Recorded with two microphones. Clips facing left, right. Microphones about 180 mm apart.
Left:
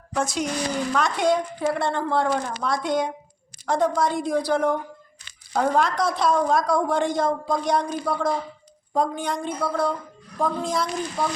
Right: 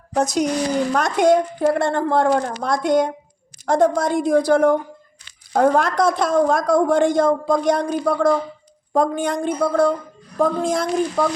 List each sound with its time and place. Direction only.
0.1 s a woman's voice: 40° right (ahead or behind)